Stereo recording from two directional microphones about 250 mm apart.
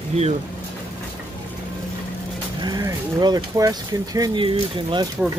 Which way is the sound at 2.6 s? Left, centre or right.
Centre.